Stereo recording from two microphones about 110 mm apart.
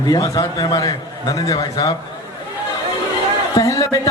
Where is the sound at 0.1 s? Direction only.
35° left (ahead or behind).